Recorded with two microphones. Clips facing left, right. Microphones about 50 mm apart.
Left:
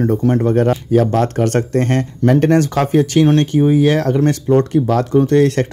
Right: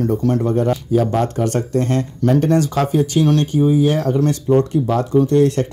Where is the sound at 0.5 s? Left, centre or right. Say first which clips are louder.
Left 3 dB; left.